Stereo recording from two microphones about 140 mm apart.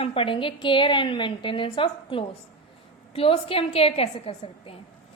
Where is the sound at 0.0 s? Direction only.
40° left (ahead or behind).